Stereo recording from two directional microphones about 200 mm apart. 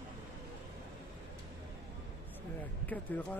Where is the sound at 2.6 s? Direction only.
10° left (ahead or behind).